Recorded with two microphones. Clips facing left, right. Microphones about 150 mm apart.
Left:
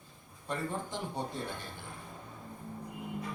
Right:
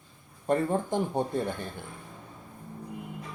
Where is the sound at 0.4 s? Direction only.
50° right (ahead or behind).